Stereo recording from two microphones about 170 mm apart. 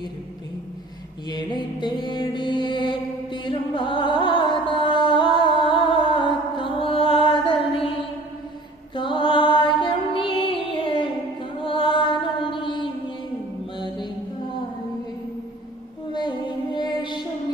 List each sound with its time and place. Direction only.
1.3 s mantra: 25° left (ahead or behind)
3.4 s music: 30° left (ahead or behind)
8.9 s music: 30° left (ahead or behind)
11.6 s mantra: 30° left (ahead or behind)
16.1 s music: 30° left (ahead or behind)